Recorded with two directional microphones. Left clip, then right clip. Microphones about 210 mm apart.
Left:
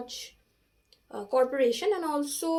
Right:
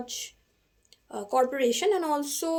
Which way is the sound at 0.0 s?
35° right (ahead or behind).